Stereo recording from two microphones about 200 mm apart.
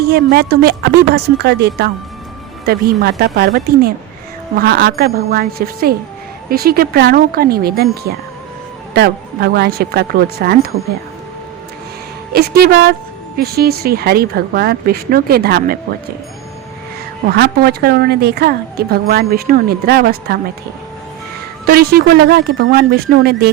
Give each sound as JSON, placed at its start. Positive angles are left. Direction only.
{"t": 0.1, "sound": "a woman's voice", "side_deg": -50}
{"t": 4.5, "sound": "a woman's voice", "side_deg": -50}
{"t": 12.3, "sound": "a woman's voice", "side_deg": -50}
{"t": 17.2, "sound": "a woman's voice", "side_deg": -55}
{"t": 21.7, "sound": "a woman's voice", "side_deg": -50}